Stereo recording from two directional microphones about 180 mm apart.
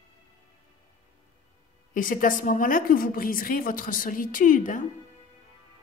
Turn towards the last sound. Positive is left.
turn(degrees=45)  # may be behind; listen again after turning